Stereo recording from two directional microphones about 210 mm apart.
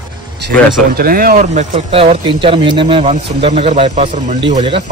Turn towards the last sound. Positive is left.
turn(degrees=-25)  # may be behind; listen again after turning